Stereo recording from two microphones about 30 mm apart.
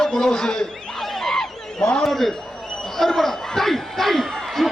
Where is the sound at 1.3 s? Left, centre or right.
Left.